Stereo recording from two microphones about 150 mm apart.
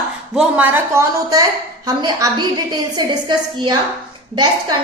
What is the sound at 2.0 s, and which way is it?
Speech, 25° right (ahead or behind).